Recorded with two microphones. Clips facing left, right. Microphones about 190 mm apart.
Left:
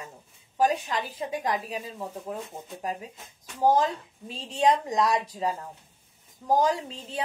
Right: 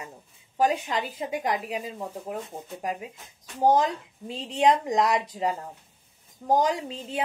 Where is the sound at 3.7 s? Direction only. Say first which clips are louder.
Right 1 dB; 20° right (ahead or behind).